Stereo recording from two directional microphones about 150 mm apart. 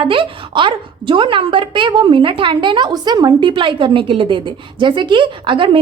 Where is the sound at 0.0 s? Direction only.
35° right (ahead or behind).